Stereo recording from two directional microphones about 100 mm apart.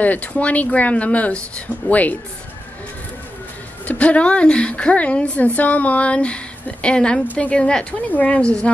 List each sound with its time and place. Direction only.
0.0 s a woman's voice: 15° left (ahead or behind)
3.8 s a woman's voice: 15° left (ahead or behind)